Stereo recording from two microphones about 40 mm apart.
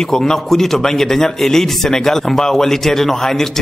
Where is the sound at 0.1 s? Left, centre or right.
Centre.